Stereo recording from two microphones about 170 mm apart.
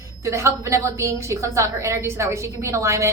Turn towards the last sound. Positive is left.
turn(degrees=-15)  # may be behind; listen again after turning